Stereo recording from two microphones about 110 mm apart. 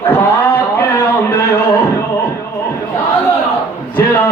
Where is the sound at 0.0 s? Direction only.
20° left (ahead or behind).